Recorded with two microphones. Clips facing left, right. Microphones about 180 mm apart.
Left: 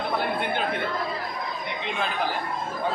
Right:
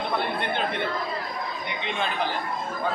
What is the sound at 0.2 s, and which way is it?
Chatter, 5° left (ahead or behind).